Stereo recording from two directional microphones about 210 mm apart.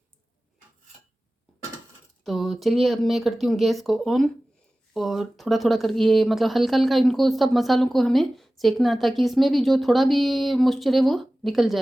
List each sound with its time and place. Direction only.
2.2 s speech: centre (ahead or behind)